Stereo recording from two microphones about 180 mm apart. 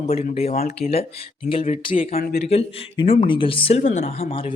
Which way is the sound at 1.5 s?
35° left (ahead or behind).